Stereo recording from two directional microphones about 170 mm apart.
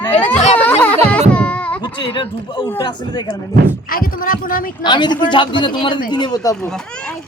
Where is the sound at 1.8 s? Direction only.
30° left (ahead or behind).